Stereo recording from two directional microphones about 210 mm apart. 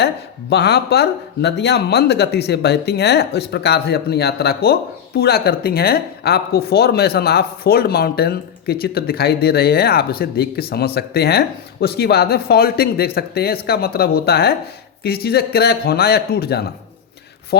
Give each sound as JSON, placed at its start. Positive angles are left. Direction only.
{"t": 0.5, "sound": "speech", "side_deg": 50}